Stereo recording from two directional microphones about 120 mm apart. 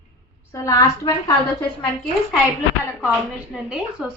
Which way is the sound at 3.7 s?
5° right (ahead or behind).